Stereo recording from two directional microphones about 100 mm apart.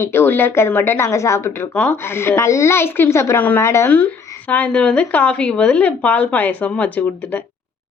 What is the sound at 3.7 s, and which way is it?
Speech, 30° left (ahead or behind).